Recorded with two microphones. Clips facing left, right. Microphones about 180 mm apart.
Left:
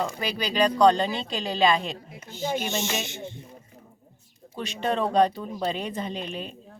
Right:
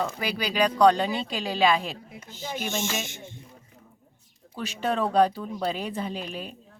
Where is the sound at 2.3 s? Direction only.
50° left (ahead or behind).